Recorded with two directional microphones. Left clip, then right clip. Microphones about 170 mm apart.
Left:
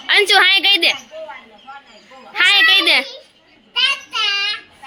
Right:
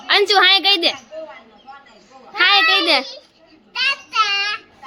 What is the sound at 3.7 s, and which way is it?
Child singing, 20° right (ahead or behind).